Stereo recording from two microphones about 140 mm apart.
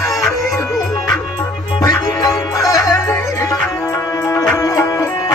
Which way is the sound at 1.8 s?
25° left (ahead or behind).